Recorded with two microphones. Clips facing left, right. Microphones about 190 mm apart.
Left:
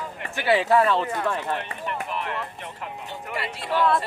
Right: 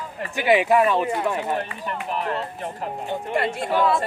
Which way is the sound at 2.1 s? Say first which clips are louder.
Right 4 dB; 40° right (ahead or behind).